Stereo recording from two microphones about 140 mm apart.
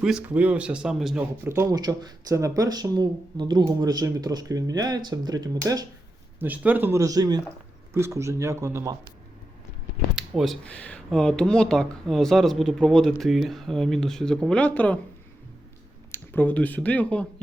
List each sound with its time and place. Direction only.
0.0 s speech: 5° right (ahead or behind)
1.5 s speech: 20° right (ahead or behind)
6.4 s speech: 10° right (ahead or behind)
10.2 s speech: centre (ahead or behind)
16.1 s speech: 15° left (ahead or behind)